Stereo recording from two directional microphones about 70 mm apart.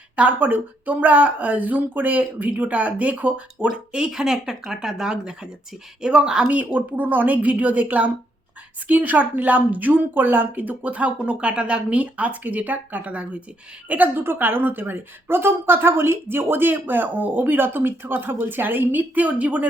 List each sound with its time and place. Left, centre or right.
0.2 s a woman's voice: right